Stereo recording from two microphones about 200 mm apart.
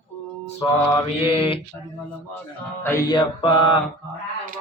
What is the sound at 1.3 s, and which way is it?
Mantra, 25° left (ahead or behind).